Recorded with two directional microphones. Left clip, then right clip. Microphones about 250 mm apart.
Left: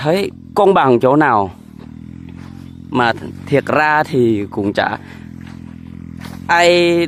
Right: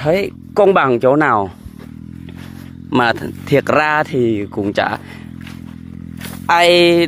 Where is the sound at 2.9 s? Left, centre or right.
Centre.